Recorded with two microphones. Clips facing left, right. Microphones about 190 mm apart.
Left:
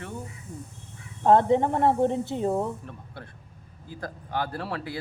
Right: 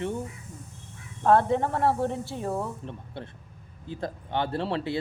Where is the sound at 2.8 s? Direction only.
25° right (ahead or behind).